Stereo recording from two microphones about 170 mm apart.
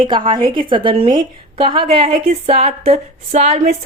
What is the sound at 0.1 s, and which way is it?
A woman's voice, 30° right (ahead or behind).